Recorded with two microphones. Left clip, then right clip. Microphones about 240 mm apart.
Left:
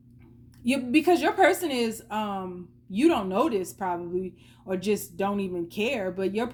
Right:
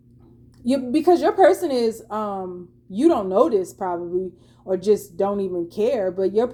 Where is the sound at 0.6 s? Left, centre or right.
Left.